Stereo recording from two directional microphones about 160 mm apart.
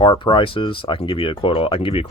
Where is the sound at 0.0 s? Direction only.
30° left (ahead or behind).